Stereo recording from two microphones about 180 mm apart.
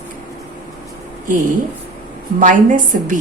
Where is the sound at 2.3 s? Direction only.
50° right (ahead or behind).